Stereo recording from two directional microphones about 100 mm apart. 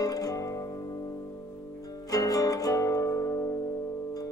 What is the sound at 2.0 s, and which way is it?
Music, 35° left (ahead or behind).